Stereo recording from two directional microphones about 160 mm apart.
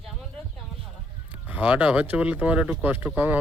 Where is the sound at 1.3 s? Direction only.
10° right (ahead or behind).